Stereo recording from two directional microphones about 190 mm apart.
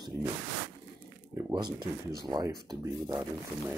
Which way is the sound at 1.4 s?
20° right (ahead or behind).